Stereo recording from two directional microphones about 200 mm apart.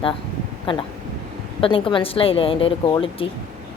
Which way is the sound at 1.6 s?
25° left (ahead or behind).